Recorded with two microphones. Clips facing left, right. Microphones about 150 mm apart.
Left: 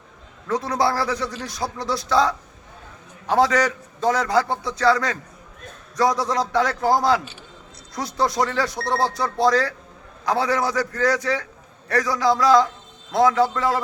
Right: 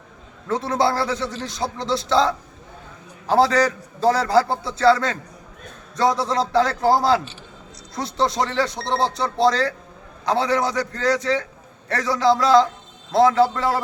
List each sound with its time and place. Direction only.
0.4 s a man's voice: 25° right (ahead or behind)